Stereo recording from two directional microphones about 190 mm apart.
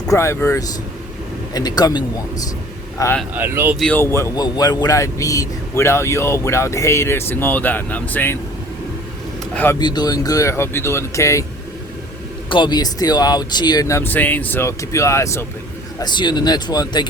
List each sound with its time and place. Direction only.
0.1 s a man's voice: 15° left (ahead or behind)
3.3 s speech: 10° right (ahead or behind)
3.8 s a man's voice: 10° left (ahead or behind)
9.7 s a man's voice: 20° left (ahead or behind)
12.5 s a man's voice: 25° left (ahead or behind)